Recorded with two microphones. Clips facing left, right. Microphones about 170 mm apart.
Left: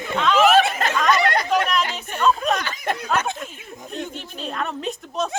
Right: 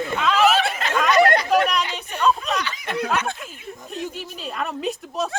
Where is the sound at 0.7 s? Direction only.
45° left (ahead or behind).